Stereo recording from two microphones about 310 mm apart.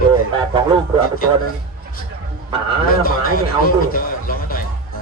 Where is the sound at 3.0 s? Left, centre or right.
Left.